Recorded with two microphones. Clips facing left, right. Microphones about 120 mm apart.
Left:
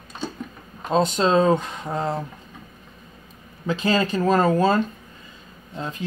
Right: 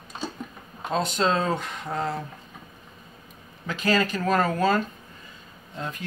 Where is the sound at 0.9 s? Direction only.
25° left (ahead or behind).